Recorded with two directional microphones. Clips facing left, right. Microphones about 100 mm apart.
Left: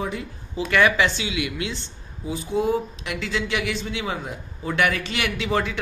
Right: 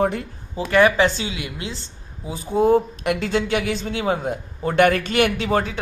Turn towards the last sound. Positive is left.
turn(degrees=-45)  # may be behind; listen again after turning